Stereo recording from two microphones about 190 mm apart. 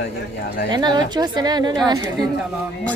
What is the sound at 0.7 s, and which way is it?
A woman's voice, 20° right (ahead or behind).